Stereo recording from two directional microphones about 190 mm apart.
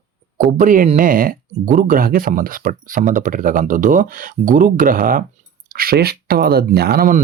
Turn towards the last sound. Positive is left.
turn(degrees=-50)  # may be behind; listen again after turning